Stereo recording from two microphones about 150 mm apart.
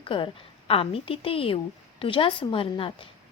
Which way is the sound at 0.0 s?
35° left (ahead or behind).